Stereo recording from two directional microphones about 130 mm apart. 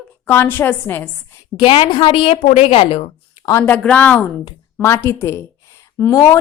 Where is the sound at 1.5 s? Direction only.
40° left (ahead or behind).